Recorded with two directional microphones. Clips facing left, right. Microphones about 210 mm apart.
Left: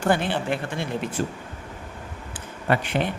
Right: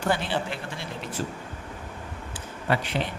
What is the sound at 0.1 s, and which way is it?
Speech, 55° left (ahead or behind).